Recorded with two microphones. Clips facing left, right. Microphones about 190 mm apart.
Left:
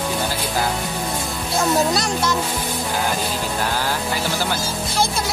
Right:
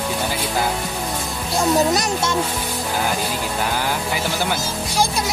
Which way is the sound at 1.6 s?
20° right (ahead or behind).